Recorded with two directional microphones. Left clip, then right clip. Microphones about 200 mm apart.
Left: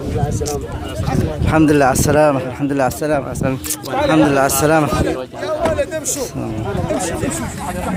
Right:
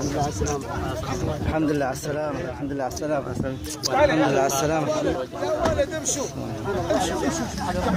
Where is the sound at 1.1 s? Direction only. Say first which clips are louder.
Left 13 dB; 50° left (ahead or behind).